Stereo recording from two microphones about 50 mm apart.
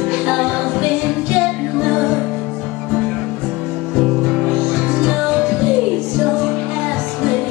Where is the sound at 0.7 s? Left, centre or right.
Right.